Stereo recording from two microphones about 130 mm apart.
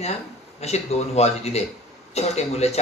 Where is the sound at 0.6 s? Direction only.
55° left (ahead or behind).